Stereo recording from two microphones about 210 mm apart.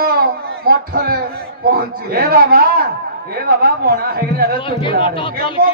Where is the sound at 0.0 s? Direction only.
45° right (ahead or behind).